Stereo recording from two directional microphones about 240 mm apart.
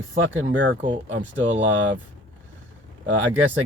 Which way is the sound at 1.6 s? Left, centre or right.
Right.